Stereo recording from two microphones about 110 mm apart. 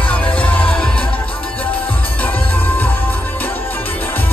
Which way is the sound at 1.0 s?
55° left (ahead or behind).